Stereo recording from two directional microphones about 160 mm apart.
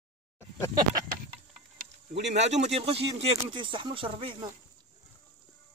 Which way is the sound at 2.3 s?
45° right (ahead or behind).